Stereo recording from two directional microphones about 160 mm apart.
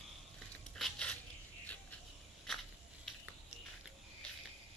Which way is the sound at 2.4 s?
Centre (ahead or behind).